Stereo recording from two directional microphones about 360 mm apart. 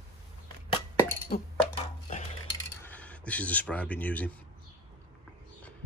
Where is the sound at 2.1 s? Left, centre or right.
Centre.